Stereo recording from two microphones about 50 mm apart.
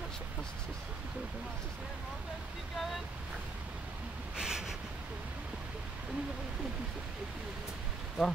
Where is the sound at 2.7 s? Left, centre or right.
Centre.